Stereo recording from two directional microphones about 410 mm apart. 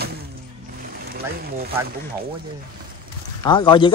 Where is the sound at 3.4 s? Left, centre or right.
Centre.